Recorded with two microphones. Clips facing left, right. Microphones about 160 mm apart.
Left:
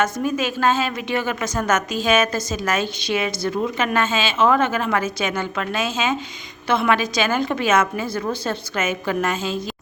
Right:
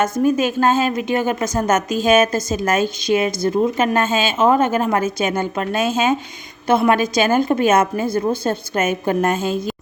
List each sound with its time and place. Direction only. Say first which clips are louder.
0.2 s a woman's voice: right 5 dB; 45° right (ahead or behind)